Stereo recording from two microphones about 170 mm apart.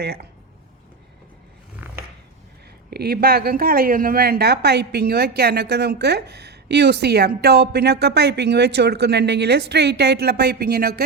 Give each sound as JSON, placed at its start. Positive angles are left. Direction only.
{"t": 0.0, "sound": "speech", "side_deg": -70}
{"t": 2.9, "sound": "speech", "side_deg": -70}